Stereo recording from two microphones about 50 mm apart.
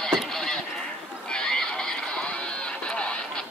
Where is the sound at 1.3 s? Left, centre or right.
Centre.